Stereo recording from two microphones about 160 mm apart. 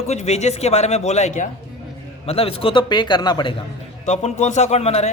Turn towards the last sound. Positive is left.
turn(degrees=40)  # may be behind; listen again after turning